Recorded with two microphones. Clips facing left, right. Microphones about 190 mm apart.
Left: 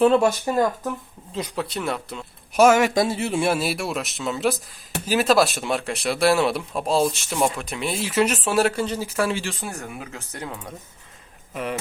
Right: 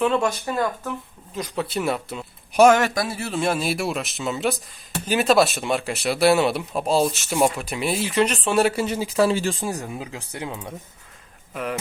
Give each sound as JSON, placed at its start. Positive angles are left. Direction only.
{"t": 0.0, "sound": "speech", "side_deg": 35}
{"t": 1.3, "sound": "speech", "side_deg": 25}
{"t": 1.5, "sound": "speech", "side_deg": -5}
{"t": 2.9, "sound": "speech", "side_deg": 25}
{"t": 8.7, "sound": "speech", "side_deg": -10}
{"t": 9.3, "sound": "speech", "side_deg": -45}
{"t": 9.6, "sound": "speech", "side_deg": -20}
{"t": 11.5, "sound": "speech", "side_deg": 0}